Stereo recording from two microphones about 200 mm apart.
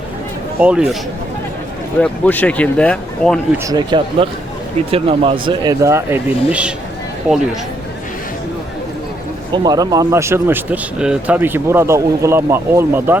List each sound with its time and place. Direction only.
0.6 s speech: 5° right (ahead or behind)
2.0 s speech: 10° left (ahead or behind)
3.6 s speech: 20° right (ahead or behind)
9.5 s speech: 20° right (ahead or behind)